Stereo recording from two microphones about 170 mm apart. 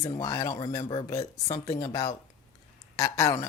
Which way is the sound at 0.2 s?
20° left (ahead or behind).